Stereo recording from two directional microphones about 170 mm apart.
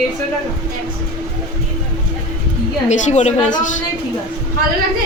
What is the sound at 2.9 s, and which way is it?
Speech, 45° left (ahead or behind).